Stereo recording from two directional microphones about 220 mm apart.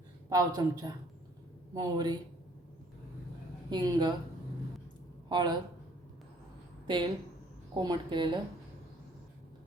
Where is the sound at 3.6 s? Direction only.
20° right (ahead or behind).